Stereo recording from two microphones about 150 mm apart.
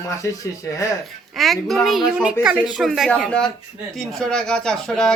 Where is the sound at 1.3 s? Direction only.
Centre (ahead or behind).